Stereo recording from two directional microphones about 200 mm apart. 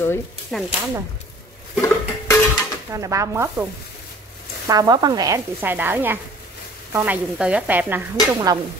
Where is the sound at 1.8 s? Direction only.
15° left (ahead or behind).